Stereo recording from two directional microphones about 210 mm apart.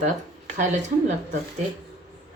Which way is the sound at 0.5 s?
35° right (ahead or behind).